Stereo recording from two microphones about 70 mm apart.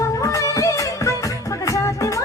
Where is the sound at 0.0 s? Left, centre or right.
Left.